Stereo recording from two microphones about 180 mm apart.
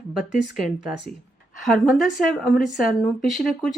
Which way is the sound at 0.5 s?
Centre (ahead or behind).